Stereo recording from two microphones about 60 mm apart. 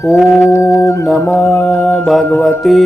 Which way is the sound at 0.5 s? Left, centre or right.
Left.